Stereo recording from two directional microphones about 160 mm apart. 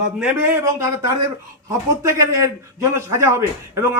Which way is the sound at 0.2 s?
10° right (ahead or behind).